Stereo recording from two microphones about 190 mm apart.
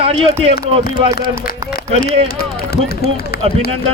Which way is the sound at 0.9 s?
50° left (ahead or behind).